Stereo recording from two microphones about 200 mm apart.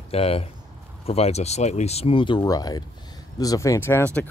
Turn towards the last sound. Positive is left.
turn(degrees=10)  # may be behind; listen again after turning